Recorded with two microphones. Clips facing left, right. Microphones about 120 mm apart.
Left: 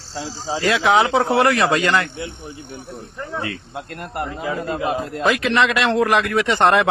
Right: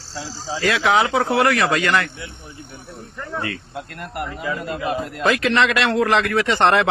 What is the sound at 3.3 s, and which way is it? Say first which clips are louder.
A man's voice: right 1 dB; 25° left (ahead or behind).